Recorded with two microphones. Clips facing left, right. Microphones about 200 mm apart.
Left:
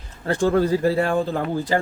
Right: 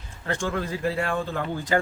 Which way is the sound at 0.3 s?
35° left (ahead or behind).